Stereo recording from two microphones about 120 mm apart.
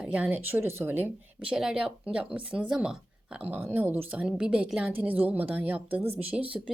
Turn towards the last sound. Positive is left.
turn(degrees=-10)  # may be behind; listen again after turning